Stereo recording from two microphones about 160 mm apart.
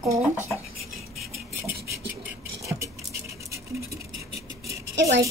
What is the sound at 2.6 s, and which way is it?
Stir, 20° right (ahead or behind).